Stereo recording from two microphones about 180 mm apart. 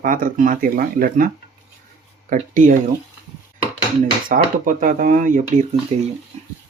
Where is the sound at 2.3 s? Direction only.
45° right (ahead or behind).